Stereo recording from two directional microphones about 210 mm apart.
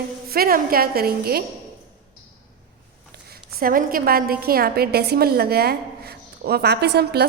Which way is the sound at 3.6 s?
40° right (ahead or behind).